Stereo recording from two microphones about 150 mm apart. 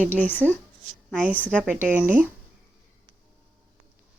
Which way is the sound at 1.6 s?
10° right (ahead or behind).